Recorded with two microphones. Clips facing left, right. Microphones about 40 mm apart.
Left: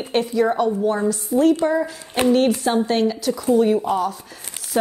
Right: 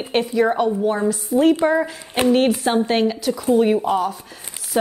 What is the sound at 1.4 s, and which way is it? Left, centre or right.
A woman's voice, right.